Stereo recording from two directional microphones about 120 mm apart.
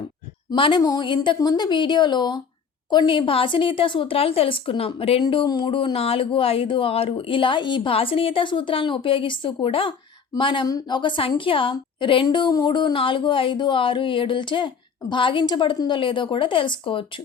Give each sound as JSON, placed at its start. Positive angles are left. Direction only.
{"t": 0.5, "sound": "speech", "side_deg": 45}
{"t": 0.8, "sound": "a woman's voice", "side_deg": 35}
{"t": 5.2, "sound": "a woman's voice", "side_deg": 40}